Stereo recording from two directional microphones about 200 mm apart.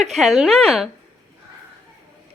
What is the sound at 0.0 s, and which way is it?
Speech, centre (ahead or behind).